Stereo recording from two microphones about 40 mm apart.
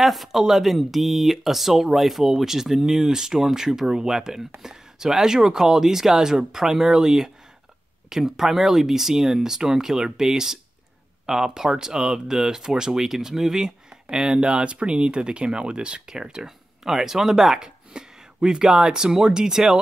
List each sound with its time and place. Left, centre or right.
0.0 s speech: centre
17.6 s speech: right